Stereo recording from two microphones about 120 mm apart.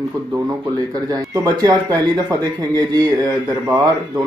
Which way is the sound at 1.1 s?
30° right (ahead or behind).